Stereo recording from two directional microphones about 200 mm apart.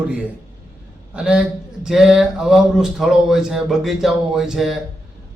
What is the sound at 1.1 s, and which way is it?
A man's voice, 5° right (ahead or behind).